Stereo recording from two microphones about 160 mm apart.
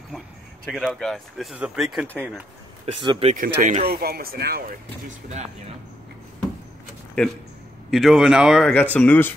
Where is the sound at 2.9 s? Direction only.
30° right (ahead or behind).